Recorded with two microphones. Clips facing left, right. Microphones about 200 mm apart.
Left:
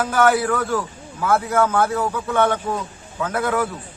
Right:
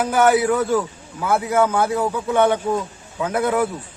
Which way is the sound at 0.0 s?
15° right (ahead or behind).